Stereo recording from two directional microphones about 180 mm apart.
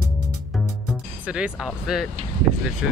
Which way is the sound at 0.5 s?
5° right (ahead or behind).